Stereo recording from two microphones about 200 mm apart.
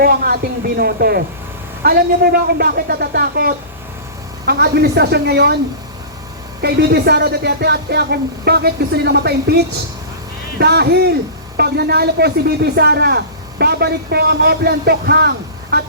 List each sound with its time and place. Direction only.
0.0 s a woman's voice: 50° right (ahead or behind)
6.6 s a man's voice: 55° right (ahead or behind)
10.6 s a man's voice: 55° right (ahead or behind)